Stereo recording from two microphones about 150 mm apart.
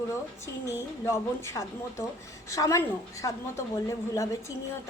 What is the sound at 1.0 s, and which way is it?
A woman's voice, 20° left (ahead or behind).